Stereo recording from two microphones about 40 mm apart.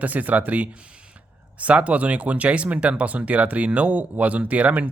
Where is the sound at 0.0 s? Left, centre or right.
Right.